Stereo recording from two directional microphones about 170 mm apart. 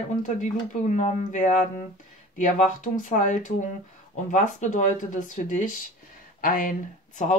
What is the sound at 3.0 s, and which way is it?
Speech, 50° left (ahead or behind).